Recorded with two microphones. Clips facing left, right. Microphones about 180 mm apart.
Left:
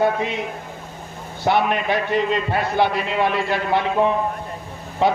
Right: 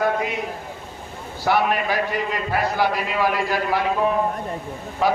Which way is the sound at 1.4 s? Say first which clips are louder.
Left 1 dB; 25° left (ahead or behind).